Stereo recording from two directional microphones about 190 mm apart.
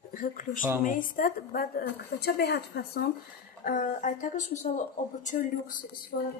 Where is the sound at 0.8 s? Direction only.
45° left (ahead or behind).